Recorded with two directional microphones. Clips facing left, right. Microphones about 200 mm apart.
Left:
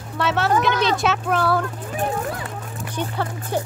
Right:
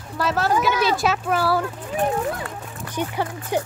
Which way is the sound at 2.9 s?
15° right (ahead or behind).